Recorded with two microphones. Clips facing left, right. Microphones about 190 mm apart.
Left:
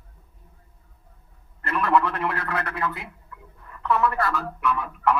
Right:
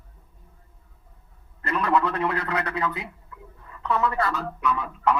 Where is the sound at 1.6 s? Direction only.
15° right (ahead or behind).